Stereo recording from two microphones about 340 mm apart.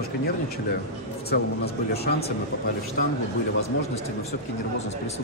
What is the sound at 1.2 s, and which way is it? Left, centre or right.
A man's voice, left.